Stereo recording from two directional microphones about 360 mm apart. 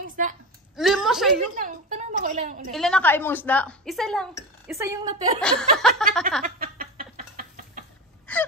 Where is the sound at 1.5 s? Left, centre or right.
Right.